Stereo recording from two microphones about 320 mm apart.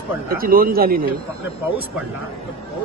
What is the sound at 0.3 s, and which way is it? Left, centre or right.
Speech, right.